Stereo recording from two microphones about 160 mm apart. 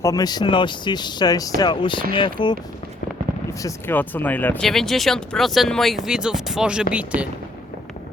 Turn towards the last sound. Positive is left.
turn(degrees=-10)  # may be behind; listen again after turning